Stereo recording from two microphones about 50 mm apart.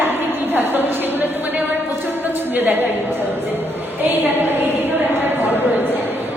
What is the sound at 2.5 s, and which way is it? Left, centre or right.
Speech, right.